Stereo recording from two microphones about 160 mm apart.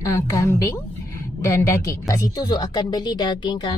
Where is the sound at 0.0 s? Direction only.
20° left (ahead or behind).